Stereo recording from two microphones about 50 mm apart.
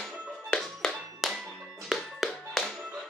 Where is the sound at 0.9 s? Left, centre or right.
Centre.